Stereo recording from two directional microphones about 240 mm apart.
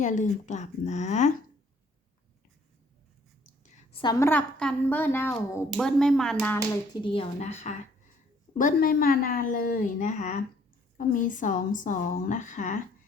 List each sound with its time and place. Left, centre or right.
0.0 s speech: left
3.4 s whispering: left
4.0 s speech: centre
6.9 s speech: left
8.5 s a woman's voice: left